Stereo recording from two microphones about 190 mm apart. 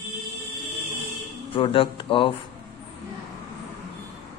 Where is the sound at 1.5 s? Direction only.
30° left (ahead or behind).